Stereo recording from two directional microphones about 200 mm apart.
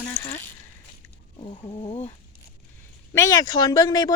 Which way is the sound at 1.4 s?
20° left (ahead or behind).